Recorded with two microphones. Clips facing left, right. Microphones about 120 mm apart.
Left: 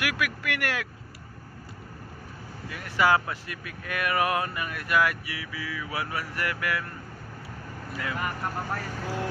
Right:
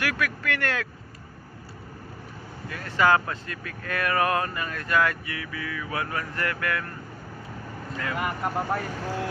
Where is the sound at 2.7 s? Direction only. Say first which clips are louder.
Right 2 dB; 15° left (ahead or behind).